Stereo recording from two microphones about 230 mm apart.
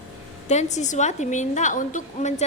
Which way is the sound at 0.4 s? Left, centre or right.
Left.